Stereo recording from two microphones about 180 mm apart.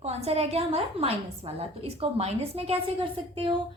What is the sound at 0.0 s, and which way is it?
A woman's voice, 35° right (ahead or behind).